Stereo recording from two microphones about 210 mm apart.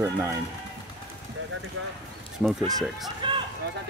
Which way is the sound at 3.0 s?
25° right (ahead or behind).